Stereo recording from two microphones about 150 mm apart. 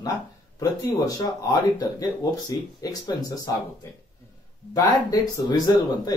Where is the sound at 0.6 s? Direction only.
20° left (ahead or behind).